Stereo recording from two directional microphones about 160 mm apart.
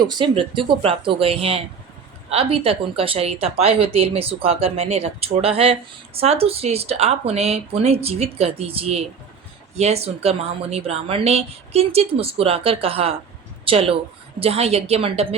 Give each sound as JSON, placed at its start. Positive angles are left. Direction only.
{"t": 0.0, "sound": "speech", "side_deg": -30}